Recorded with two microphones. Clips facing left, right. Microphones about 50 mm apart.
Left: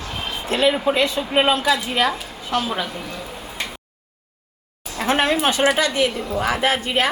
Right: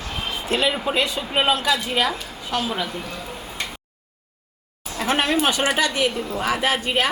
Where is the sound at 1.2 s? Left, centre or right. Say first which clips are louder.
Left 3 dB; centre.